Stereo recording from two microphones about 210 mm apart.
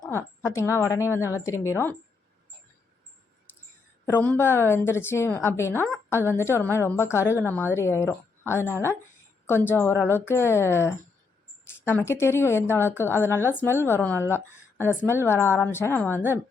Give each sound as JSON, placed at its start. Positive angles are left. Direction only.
{"t": 0.1, "sound": "speech", "side_deg": 15}
{"t": 4.0, "sound": "speech", "side_deg": 10}